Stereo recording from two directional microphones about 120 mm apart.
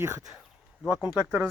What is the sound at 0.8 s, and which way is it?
Speech, 5° right (ahead or behind).